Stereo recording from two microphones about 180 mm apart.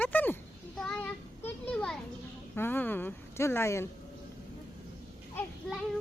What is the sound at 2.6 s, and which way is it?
Speech, 10° left (ahead or behind).